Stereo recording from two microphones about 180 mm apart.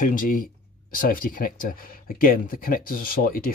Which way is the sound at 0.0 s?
50° left (ahead or behind).